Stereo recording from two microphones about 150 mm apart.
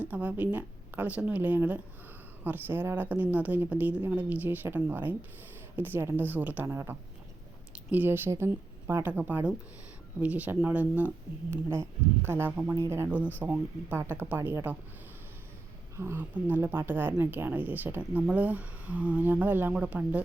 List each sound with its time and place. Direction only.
0.0 s speech: 10° right (ahead or behind)
16.0 s speech: 15° right (ahead or behind)